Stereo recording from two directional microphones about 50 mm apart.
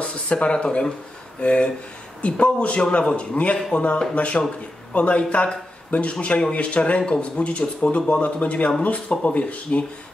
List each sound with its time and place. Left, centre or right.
0.0 s speech: left